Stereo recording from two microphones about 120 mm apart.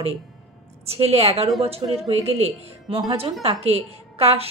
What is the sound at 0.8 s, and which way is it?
Speech, 55° right (ahead or behind).